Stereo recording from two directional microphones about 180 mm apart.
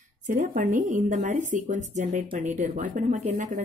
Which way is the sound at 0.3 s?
45° right (ahead or behind).